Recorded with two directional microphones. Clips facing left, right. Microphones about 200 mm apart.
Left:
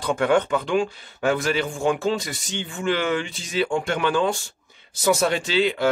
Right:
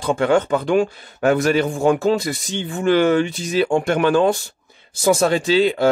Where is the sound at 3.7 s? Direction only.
55° right (ahead or behind).